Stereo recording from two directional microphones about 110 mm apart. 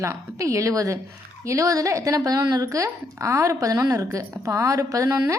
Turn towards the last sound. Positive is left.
turn(degrees=-30)  # may be behind; listen again after turning